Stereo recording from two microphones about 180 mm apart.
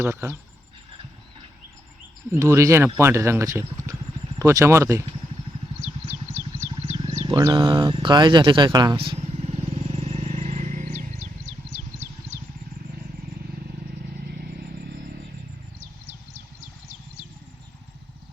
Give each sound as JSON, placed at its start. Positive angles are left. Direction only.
{"t": 0.0, "sound": "speech", "side_deg": -10}
{"t": 2.4, "sound": "speech", "side_deg": -15}
{"t": 6.3, "sound": "vehicle", "side_deg": -40}
{"t": 7.3, "sound": "speech", "side_deg": -20}
{"t": 9.9, "sound": "a sound", "side_deg": -35}